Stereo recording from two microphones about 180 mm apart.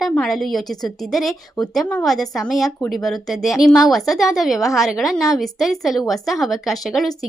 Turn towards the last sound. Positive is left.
turn(degrees=0)  # may be behind; listen again after turning